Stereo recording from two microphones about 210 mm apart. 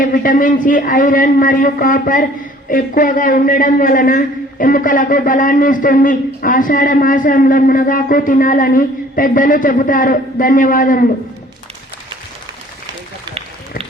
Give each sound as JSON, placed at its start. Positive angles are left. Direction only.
{"t": 0.0, "sound": "a man's voice", "side_deg": 40}